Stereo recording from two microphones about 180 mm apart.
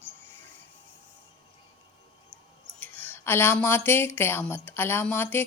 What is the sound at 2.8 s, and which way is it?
Speech, 10° left (ahead or behind).